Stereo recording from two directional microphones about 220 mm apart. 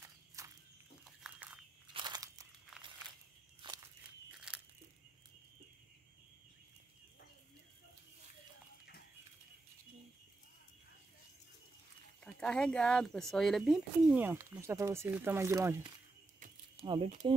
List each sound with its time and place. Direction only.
0.4 s walk: 15° right (ahead or behind)
1.0 s a sound: 5° right (ahead or behind)
2.0 s crunch: 20° right (ahead or behind)
2.7 s a sound: centre (ahead or behind)
3.6 s walk: 20° right (ahead or behind)
4.3 s crunch: 5° right (ahead or behind)
12.2 s speech: 5° left (ahead or behind); by 15.9 s 15° right (ahead or behind)
16.3 s a sound: 35° right (ahead or behind)
16.8 s speech: 20° right (ahead or behind)